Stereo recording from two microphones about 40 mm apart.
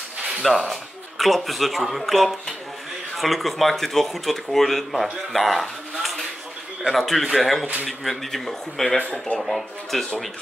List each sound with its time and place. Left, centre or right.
0.4 s speech: centre
5.3 s a sound: centre
6.9 s speech: centre